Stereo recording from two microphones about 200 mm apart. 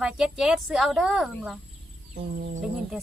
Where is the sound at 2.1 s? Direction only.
45° right (ahead or behind).